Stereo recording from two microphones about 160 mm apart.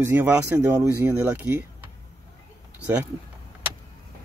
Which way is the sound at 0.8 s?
10° right (ahead or behind).